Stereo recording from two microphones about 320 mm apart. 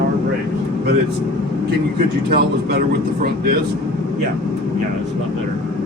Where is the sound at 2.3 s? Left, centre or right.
Right.